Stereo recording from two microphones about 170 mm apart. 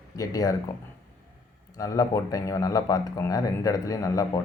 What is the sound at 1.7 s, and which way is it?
Speech, 20° left (ahead or behind).